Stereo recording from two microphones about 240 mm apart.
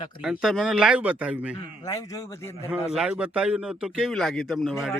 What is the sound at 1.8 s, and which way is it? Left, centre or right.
Speech, centre.